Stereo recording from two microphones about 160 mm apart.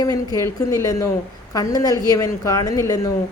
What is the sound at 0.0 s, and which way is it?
A woman's voice, 25° left (ahead or behind).